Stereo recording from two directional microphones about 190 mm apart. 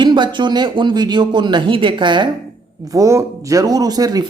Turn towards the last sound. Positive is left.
turn(degrees=-20)  # may be behind; listen again after turning